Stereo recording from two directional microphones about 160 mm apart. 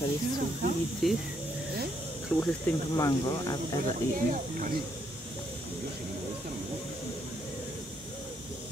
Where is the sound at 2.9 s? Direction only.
20° left (ahead or behind).